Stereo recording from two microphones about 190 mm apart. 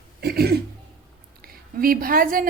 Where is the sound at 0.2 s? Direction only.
55° right (ahead or behind).